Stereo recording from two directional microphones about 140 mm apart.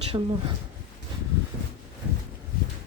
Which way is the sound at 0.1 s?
40° right (ahead or behind).